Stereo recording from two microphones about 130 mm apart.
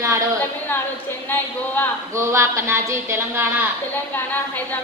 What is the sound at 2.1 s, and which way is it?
A woman's voice, 20° right (ahead or behind).